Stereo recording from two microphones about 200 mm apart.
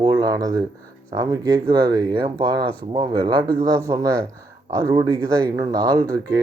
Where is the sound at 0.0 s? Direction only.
20° right (ahead or behind).